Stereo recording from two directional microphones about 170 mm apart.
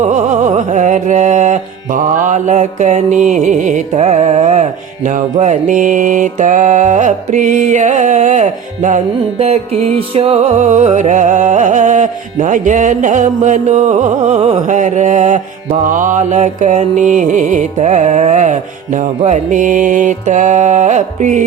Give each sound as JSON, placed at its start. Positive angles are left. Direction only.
{"t": 0.0, "sound": "music", "side_deg": -45}
{"t": 10.2, "sound": "music", "side_deg": -35}